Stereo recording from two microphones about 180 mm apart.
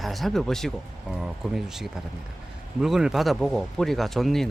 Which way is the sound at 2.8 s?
5° right (ahead or behind).